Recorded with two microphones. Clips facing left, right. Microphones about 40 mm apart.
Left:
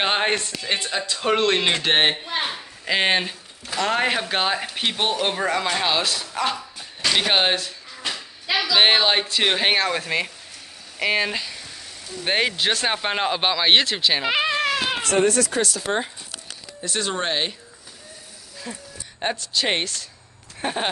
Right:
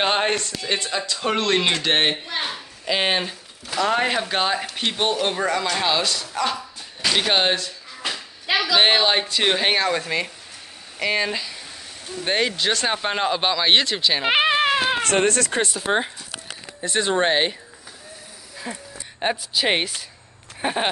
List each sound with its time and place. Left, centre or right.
0.0 s speech: centre
8.7 s speech: centre
14.3 s a sound: right
15.0 s speech: right
15.6 s speech: right
18.7 s speech: centre